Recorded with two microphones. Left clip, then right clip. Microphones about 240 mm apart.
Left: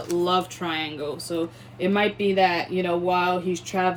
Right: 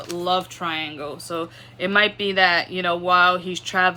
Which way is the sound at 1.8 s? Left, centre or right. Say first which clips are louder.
Right 4 dB; centre.